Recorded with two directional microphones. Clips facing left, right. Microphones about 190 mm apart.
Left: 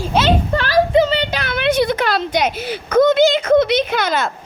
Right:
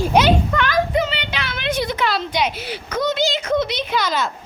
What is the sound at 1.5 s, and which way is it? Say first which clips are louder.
Speech: left 7 dB; 65° left (ahead or behind).